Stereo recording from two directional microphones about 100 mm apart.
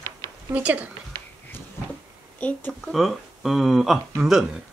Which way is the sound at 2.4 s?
15° left (ahead or behind).